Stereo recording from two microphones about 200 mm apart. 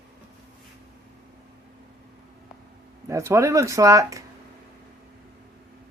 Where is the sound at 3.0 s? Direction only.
15° right (ahead or behind).